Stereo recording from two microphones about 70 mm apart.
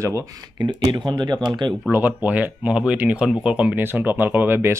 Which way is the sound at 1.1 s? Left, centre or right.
Right.